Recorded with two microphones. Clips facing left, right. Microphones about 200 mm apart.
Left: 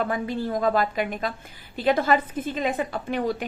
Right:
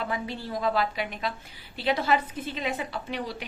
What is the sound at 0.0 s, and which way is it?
A woman's voice, 50° left (ahead or behind).